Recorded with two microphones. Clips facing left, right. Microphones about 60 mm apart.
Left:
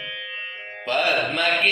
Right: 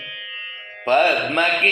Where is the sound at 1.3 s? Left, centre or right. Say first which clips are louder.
Right 3 dB; right.